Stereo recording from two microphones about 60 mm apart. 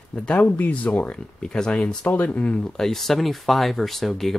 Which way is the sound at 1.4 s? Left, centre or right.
Centre.